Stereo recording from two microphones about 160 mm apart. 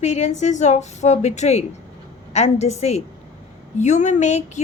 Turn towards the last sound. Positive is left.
turn(degrees=45)  # may be behind; listen again after turning